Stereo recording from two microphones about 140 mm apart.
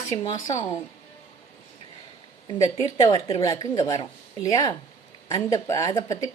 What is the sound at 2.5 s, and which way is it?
Speech, 25° left (ahead or behind).